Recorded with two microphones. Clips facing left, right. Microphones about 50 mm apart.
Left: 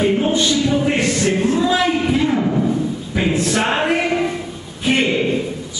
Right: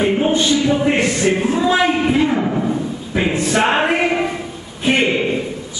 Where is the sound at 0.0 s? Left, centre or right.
Centre.